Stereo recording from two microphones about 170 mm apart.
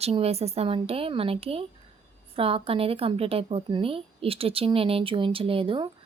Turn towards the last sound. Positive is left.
turn(degrees=-30)  # may be behind; listen again after turning